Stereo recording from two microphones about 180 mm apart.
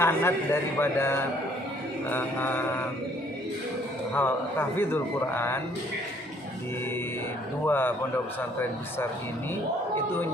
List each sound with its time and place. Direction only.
0.0 s a man's voice: 15° left (ahead or behind)
4.1 s a man's voice: 10° left (ahead or behind)
7.6 s a man's voice: 10° left (ahead or behind)
9.9 s a man's voice: 10° left (ahead or behind)